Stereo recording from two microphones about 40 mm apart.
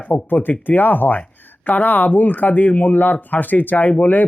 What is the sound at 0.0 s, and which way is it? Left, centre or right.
Speech, left.